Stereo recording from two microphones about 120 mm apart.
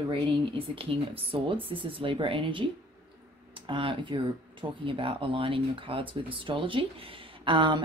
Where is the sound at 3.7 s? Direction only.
45° right (ahead or behind).